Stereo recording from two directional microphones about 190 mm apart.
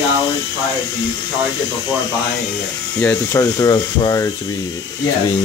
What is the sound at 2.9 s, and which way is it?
Speech, 10° left (ahead or behind).